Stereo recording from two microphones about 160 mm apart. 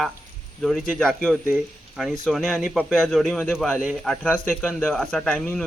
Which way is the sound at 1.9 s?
Centre (ahead or behind).